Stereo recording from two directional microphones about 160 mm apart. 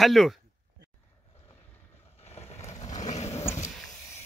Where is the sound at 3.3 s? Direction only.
15° left (ahead or behind).